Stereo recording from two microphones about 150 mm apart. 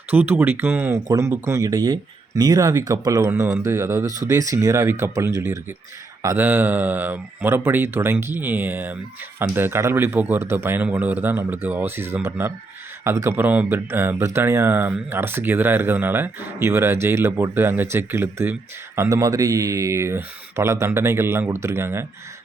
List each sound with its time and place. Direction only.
0.1 s speech: 10° right (ahead or behind)